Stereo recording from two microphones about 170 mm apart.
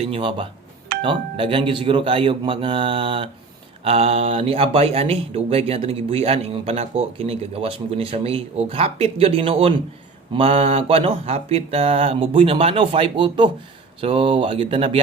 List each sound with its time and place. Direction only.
0.0 s speech: 30° right (ahead or behind)